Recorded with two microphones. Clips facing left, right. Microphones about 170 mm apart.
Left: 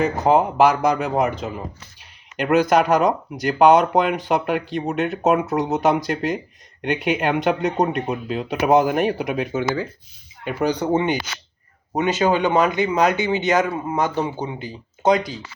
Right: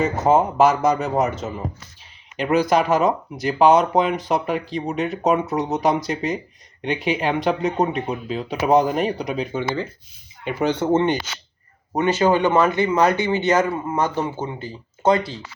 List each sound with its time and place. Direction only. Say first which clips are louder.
0.0 s speech: even; centre (ahead or behind); by 15.4 s 15° left (ahead or behind)